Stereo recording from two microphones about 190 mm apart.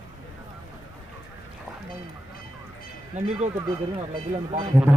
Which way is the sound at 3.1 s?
40° right (ahead or behind).